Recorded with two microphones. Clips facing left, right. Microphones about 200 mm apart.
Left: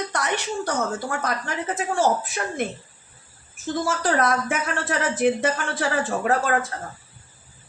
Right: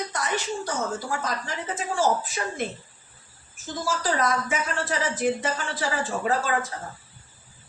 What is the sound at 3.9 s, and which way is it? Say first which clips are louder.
Speech: left 2 dB; 60° left (ahead or behind).